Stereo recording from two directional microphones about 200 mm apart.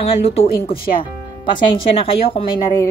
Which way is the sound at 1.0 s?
25° left (ahead or behind).